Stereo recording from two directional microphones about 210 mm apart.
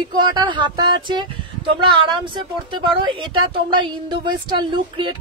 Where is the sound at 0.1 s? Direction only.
20° right (ahead or behind).